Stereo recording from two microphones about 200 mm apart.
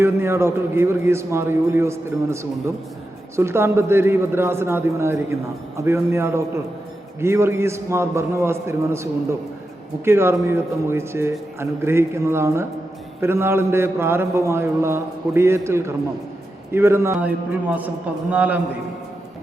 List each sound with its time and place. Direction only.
0.0 s a man's voice: 15° right (ahead or behind)